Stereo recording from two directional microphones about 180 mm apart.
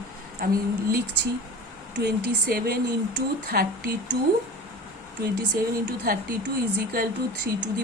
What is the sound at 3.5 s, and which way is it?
Speech, 55° right (ahead or behind).